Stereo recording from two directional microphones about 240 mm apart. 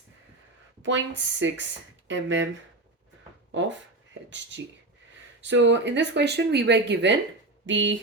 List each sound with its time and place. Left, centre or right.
0.8 s speech: right
3.5 s speech: right
5.4 s speech: right